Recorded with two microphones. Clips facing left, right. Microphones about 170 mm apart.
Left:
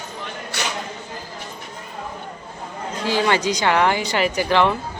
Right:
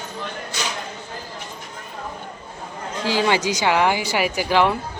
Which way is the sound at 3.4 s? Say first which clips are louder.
Left 1 dB; 10° right (ahead or behind).